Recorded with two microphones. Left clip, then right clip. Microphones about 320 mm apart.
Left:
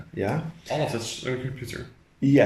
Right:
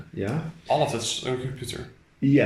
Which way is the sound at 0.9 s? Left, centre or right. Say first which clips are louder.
Right 2 dB; centre.